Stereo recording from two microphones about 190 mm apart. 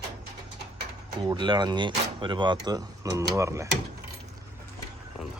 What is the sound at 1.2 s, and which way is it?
Speech, 25° right (ahead or behind).